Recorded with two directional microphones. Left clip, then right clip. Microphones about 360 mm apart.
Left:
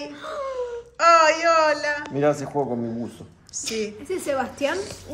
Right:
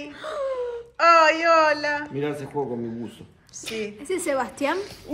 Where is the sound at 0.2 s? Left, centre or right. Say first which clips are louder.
Right 2 dB; right.